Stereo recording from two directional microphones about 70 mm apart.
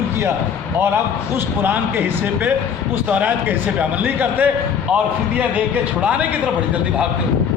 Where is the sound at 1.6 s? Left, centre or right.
Right.